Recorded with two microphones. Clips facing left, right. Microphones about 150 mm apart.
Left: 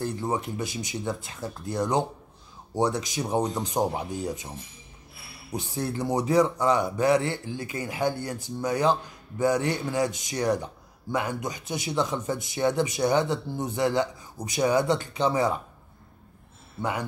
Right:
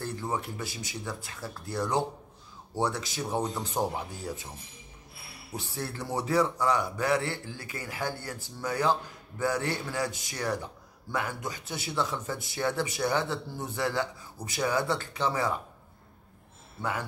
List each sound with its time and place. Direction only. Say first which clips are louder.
0.0 s a man's voice: left 4 dB; 20° left (ahead or behind)
5.5 s a man's voice: left 6 dB; 20° left (ahead or behind)
16.8 s a man's voice: left 4 dB; 20° left (ahead or behind)